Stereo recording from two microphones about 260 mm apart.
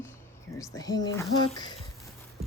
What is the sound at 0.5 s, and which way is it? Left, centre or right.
Speech, centre.